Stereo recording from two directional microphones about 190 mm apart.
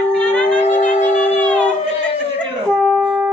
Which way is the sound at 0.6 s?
40° left (ahead or behind).